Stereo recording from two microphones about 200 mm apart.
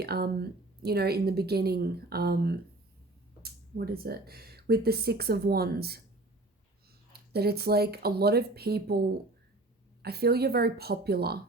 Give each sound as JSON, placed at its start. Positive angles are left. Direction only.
{"t": 0.0, "sound": "speech", "side_deg": -50}
{"t": 7.1, "sound": "speech", "side_deg": -50}